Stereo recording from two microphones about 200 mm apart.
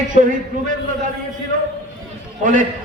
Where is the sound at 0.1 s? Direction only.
40° right (ahead or behind).